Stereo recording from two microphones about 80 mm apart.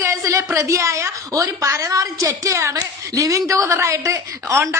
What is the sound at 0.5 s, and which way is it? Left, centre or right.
A woman's voice, right.